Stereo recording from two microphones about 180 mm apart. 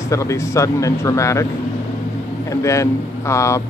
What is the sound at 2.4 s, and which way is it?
Speech, 15° left (ahead or behind).